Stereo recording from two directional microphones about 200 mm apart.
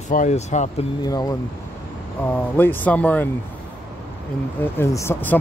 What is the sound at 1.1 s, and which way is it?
Speech, 20° left (ahead or behind).